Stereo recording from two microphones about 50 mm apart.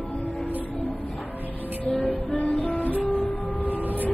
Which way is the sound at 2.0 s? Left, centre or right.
Left.